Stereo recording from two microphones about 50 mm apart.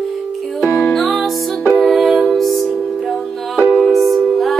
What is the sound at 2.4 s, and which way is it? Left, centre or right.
Music, centre.